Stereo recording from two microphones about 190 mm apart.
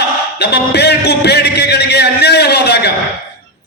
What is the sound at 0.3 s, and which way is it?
A man's voice, 60° left (ahead or behind).